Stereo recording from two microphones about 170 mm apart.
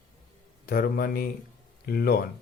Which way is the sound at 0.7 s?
60° left (ahead or behind).